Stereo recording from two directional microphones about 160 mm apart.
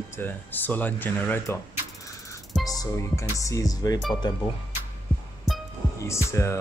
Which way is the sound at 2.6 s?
25° left (ahead or behind).